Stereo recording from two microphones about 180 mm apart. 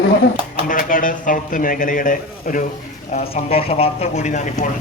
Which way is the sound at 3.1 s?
35° left (ahead or behind).